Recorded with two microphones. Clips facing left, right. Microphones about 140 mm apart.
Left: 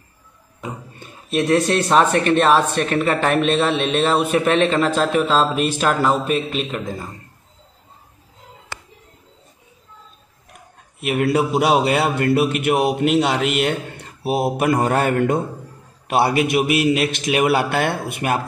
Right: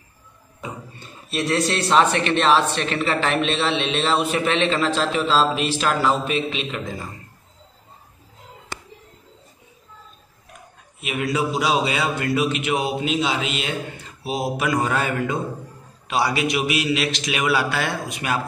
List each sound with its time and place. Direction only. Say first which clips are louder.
0.6 s a man's voice: left 2 dB; 50° left (ahead or behind)
11.0 s a man's voice: left 5 dB; 60° left (ahead or behind)